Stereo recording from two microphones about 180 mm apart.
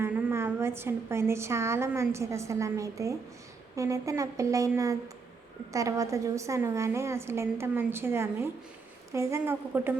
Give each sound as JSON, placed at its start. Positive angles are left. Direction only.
{"t": 0.0, "sound": "a woman's voice", "side_deg": -15}